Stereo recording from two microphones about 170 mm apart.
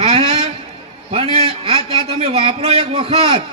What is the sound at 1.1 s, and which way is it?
A man's voice, 35° right (ahead or behind).